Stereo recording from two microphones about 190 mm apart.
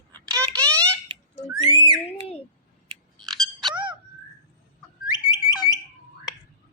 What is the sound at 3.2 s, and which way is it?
Frog, centre (ahead or behind).